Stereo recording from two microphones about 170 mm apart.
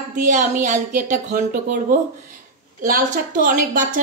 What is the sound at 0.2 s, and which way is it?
A woman's voice, 50° right (ahead or behind).